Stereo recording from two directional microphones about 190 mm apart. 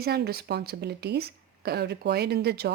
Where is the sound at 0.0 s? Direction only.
55° right (ahead or behind).